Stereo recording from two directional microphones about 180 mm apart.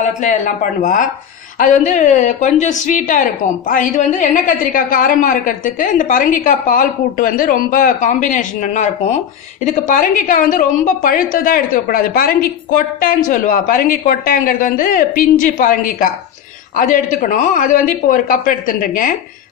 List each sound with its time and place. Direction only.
0.0 s a woman's voice: 45° left (ahead or behind)